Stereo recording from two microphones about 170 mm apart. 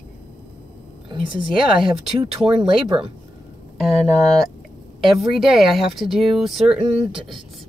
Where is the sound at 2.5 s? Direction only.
30° right (ahead or behind).